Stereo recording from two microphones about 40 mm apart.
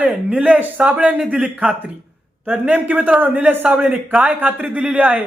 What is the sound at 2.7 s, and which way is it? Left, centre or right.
Speech, right.